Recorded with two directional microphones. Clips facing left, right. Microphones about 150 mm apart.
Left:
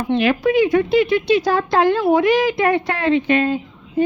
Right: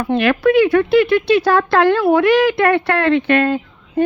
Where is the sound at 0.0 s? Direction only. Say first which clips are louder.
Right 2 dB; 65° right (ahead or behind).